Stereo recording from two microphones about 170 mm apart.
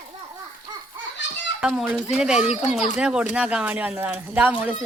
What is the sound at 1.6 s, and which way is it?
A woman's voice, 5° right (ahead or behind).